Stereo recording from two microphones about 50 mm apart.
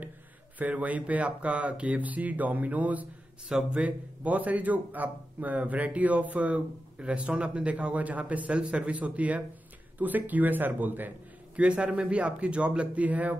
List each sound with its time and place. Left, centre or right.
0.6 s speech: right
3.4 s speech: centre
3.8 s a man's voice: right
11.5 s a man's voice: right